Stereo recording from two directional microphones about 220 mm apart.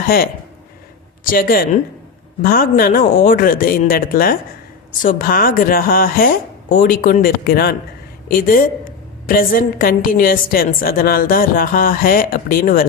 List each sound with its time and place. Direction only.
0.0 s a woman's voice: 40° left (ahead or behind)